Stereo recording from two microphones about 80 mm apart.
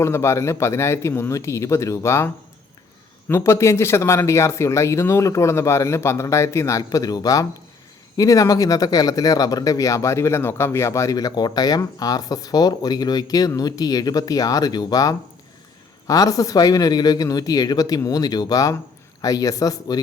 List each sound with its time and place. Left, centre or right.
0.0 s speech: left
3.3 s speech: left